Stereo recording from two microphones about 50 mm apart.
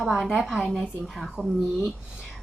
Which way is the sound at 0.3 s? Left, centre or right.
Centre.